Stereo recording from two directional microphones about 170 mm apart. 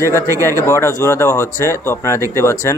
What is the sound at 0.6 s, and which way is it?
Speech, 15° left (ahead or behind).